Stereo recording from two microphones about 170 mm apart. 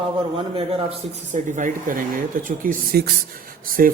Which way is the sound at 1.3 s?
45° right (ahead or behind).